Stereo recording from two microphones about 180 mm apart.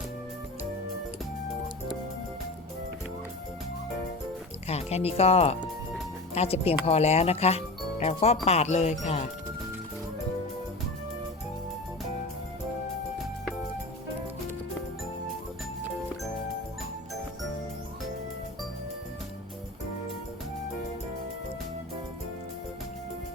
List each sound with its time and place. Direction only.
4.7 s speech: 35° left (ahead or behind)